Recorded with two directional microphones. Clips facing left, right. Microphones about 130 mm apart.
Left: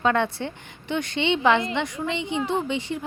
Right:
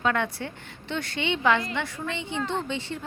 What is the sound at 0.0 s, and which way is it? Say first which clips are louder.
A woman's voice: left 4 dB; 30° left (ahead or behind).